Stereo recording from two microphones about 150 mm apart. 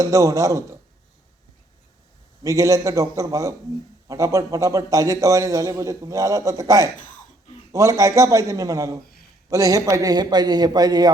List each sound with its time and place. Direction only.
0.0 s a man's voice: 20° right (ahead or behind)
2.4 s a man's voice: 20° right (ahead or behind)